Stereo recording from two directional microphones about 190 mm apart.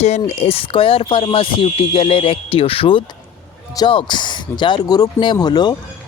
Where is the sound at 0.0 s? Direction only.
35° left (ahead or behind).